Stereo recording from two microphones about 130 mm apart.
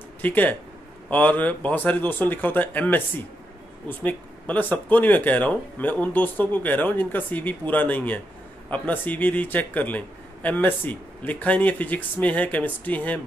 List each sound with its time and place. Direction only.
0.2 s a man's voice: 15° left (ahead or behind)
4.0 s a man's voice: 10° left (ahead or behind)